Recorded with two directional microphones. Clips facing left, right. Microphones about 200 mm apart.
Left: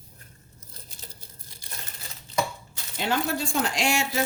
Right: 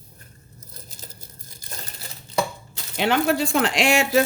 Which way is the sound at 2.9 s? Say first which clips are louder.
Right 6 dB; 75° right (ahead or behind).